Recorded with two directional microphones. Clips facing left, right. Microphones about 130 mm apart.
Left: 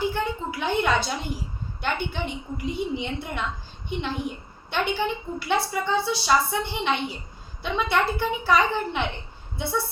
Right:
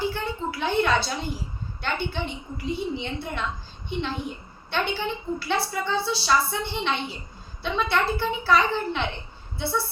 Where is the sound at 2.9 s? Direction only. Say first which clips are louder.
Left 1 dB; 15° left (ahead or behind).